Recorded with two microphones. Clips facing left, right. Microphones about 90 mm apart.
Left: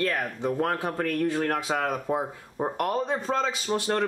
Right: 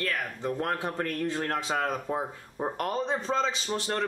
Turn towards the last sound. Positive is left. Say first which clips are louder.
# left 4 dB
turn(degrees=10)  # may be behind; listen again after turning